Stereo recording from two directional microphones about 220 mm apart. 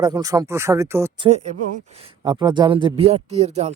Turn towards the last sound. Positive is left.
turn(degrees=-30)  # may be behind; listen again after turning